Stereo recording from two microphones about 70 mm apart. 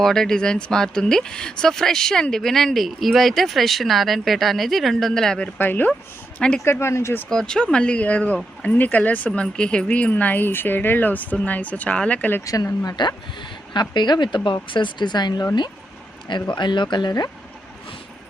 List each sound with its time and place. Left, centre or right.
0.0 s speech: centre
5.5 s speech: left
6.7 s speech: left
7.3 s speech: centre
12.5 s speech: left
13.0 s speech: left